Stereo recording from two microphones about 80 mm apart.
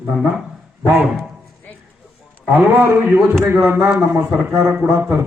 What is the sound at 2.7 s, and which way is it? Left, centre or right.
A man's voice, right.